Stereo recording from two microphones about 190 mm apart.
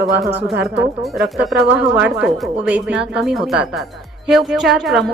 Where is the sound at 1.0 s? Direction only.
Centre (ahead or behind).